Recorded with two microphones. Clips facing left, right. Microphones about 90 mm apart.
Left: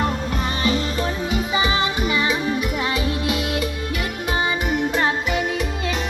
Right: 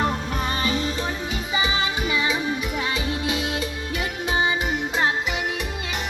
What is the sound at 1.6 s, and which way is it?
Music, 20° right (ahead or behind).